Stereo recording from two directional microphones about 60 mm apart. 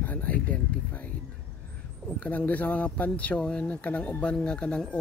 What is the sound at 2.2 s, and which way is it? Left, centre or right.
Speech, left.